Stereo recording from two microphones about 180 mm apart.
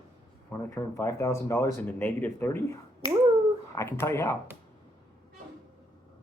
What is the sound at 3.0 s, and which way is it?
Finger snapping, 25° left (ahead or behind).